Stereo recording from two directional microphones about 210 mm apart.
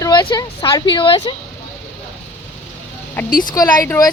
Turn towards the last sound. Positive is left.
turn(degrees=15)  # may be behind; listen again after turning